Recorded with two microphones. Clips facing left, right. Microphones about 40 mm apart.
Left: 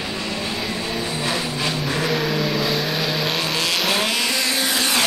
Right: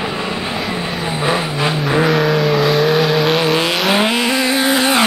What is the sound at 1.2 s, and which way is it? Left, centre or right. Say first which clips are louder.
Vehicle: right 9 dB; right.